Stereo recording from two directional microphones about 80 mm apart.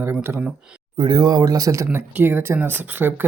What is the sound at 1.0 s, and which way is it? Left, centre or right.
Speech, right.